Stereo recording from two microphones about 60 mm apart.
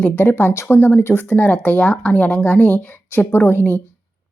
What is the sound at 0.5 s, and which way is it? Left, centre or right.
Speech, left.